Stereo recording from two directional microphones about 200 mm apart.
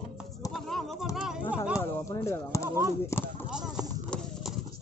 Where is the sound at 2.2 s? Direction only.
15° left (ahead or behind).